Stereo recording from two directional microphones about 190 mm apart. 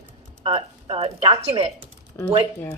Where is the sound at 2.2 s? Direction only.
15° left (ahead or behind).